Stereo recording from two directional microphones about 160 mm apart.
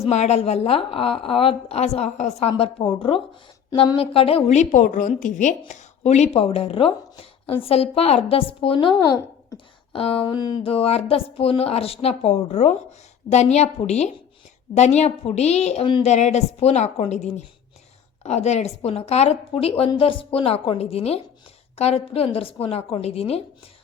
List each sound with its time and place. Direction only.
0.0 s a woman's voice: 45° left (ahead or behind)
3.9 s a woman's voice: 35° left (ahead or behind)
10.7 s a woman's voice: 40° left (ahead or behind)